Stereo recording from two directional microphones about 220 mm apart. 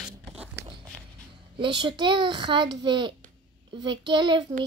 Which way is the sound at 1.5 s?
20° right (ahead or behind).